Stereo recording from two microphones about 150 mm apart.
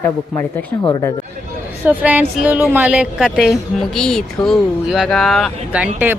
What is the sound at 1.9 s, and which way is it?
Speech, 10° right (ahead or behind).